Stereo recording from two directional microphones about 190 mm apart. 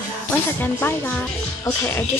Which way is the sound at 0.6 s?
10° left (ahead or behind).